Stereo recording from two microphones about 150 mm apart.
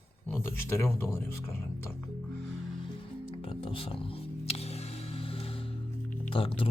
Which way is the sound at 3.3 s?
35° left (ahead or behind).